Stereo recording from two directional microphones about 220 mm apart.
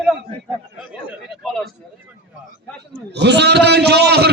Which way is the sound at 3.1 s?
50° right (ahead or behind).